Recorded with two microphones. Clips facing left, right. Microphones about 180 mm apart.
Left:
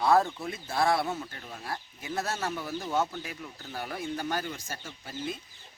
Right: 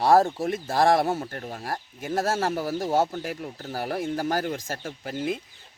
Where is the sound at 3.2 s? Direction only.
55° right (ahead or behind).